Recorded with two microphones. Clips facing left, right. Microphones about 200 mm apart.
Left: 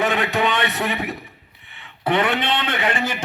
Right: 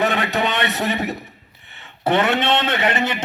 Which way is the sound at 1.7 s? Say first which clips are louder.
Right 2 dB; 45° right (ahead or behind).